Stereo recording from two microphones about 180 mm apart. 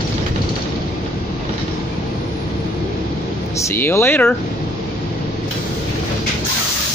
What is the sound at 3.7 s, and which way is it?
Speech, 15° left (ahead or behind).